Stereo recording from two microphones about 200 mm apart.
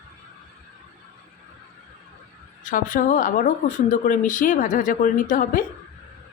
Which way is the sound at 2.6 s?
40° left (ahead or behind).